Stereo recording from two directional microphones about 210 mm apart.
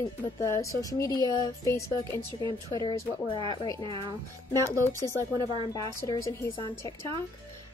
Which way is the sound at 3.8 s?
25° right (ahead or behind).